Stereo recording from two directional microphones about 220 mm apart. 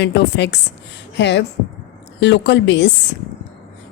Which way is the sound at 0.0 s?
50° left (ahead or behind).